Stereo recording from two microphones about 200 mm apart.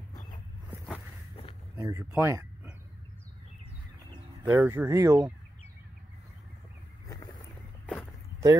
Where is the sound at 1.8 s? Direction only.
15° right (ahead or behind).